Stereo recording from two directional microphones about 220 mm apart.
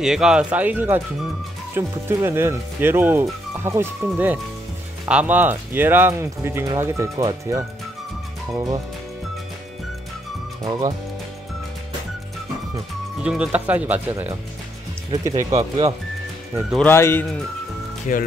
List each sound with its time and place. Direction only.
0.0 s speech: 5° right (ahead or behind)
10.6 s speech: 15° right (ahead or behind)
13.2 s speech: 5° right (ahead or behind)
15.3 s speech: 25° right (ahead or behind)
16.7 s speech: 10° left (ahead or behind)
18.1 s speech: 35° left (ahead or behind)